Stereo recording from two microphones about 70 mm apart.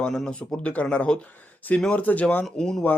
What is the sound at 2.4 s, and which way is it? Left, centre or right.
Speech, centre.